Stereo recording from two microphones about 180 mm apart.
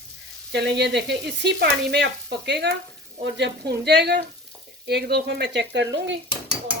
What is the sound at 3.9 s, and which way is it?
Speech, 70° right (ahead or behind).